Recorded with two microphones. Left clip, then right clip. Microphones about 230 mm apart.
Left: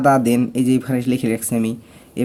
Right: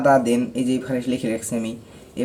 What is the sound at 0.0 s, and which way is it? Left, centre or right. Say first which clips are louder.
Speech: left 2 dB; left.